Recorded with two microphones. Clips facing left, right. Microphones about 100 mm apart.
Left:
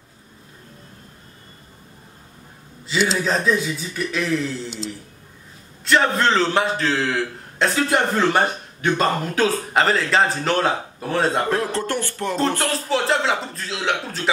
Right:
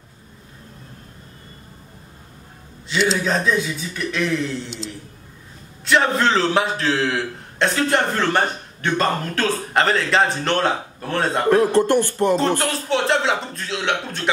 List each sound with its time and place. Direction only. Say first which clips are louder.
2.9 s a man's voice: right 1 dB; centre (ahead or behind)
11.4 s speech: right 7 dB; 15° right (ahead or behind)
12.4 s a man's voice: right 1 dB; centre (ahead or behind)